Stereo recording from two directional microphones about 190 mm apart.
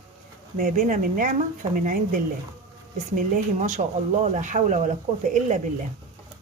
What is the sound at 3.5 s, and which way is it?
Speech, 40° right (ahead or behind).